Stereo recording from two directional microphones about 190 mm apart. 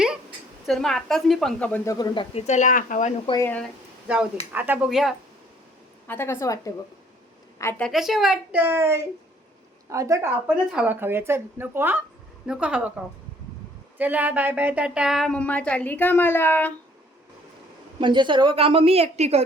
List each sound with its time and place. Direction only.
0.6 s a woman's voice: centre (ahead or behind); by 2.4 s 25° left (ahead or behind)
2.5 s speech: 40° left (ahead or behind)
3.2 s a woman's voice: 15° left (ahead or behind)
4.5 s speech: 10° right (ahead or behind)
6.1 s a woman's voice: 10° left (ahead or behind)
7.9 s a woman's voice: centre (ahead or behind)
14.0 s a woman's voice: 10° right (ahead or behind); by 16.7 s 10° left (ahead or behind)
18.0 s a woman's voice: 25° right (ahead or behind)